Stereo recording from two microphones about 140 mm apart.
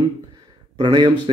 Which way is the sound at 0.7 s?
35° right (ahead or behind).